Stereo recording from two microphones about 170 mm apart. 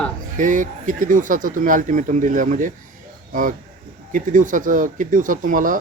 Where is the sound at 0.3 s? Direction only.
50° right (ahead or behind).